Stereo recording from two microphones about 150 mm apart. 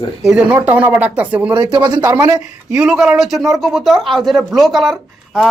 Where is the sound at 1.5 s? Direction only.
30° right (ahead or behind).